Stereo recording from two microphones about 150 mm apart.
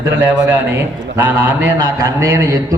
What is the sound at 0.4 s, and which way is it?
A man's voice, 15° right (ahead or behind).